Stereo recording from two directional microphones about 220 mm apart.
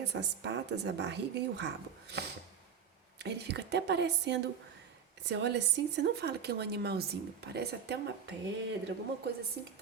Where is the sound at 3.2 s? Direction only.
50° right (ahead or behind).